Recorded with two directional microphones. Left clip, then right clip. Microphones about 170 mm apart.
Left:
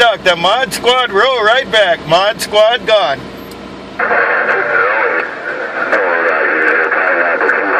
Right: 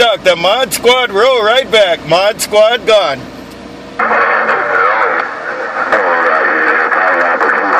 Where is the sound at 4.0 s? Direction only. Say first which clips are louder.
Right 2 dB; 45° right (ahead or behind).